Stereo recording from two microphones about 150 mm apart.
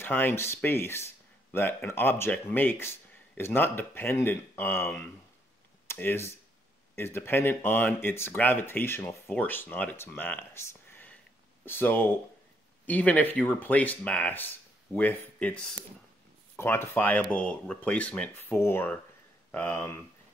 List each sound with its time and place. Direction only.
0.0 s speech: 15° left (ahead or behind)